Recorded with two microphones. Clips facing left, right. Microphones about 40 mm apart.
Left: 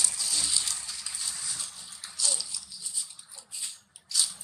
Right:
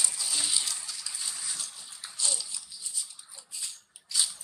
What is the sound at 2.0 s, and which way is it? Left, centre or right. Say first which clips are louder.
Bathtub: left 1 dB; right.